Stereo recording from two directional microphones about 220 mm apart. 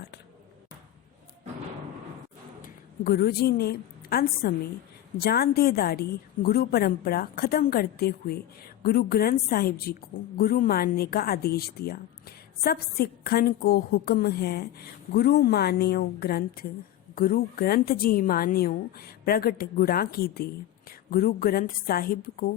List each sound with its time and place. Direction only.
2.6 s a woman's voice: 45° left (ahead or behind)